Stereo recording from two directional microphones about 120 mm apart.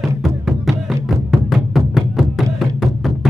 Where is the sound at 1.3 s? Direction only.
Centre (ahead or behind).